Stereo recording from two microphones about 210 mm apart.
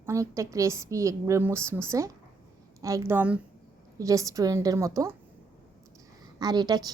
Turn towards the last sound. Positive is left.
turn(degrees=-20)  # may be behind; listen again after turning